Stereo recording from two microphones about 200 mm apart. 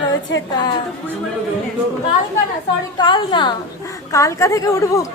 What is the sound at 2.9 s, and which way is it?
Music, 25° left (ahead or behind).